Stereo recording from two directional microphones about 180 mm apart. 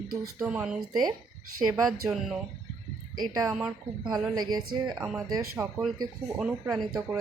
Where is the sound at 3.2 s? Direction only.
20° right (ahead or behind).